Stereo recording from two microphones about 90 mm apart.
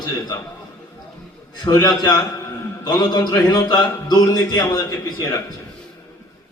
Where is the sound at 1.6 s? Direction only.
50° left (ahead or behind).